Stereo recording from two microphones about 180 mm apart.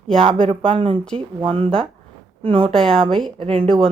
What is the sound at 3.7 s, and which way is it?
Speech, 5° left (ahead or behind).